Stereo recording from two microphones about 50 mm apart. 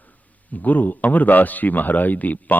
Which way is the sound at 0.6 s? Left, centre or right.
Left.